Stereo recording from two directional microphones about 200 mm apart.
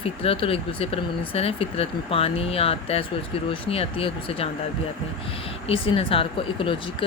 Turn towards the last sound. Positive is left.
turn(degrees=25)  # may be behind; listen again after turning